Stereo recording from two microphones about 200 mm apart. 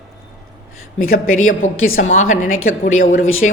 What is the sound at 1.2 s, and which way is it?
Speech, 90° left.